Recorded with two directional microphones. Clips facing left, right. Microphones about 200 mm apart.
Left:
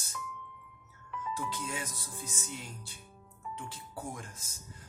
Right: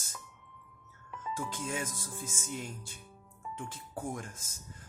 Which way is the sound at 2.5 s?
50° right (ahead or behind).